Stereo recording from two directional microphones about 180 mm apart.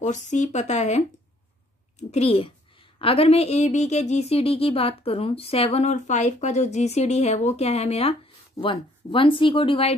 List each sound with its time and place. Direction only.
0.0 s a woman's voice: 40° left (ahead or behind)